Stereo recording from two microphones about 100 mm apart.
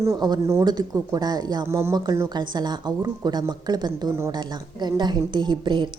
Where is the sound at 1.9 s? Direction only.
40° right (ahead or behind).